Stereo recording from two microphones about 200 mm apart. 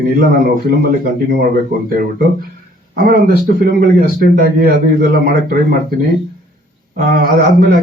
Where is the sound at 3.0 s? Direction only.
45° right (ahead or behind).